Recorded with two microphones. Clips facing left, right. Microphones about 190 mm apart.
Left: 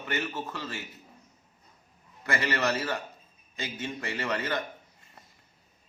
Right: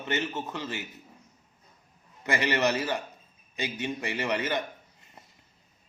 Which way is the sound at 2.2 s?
20° right (ahead or behind).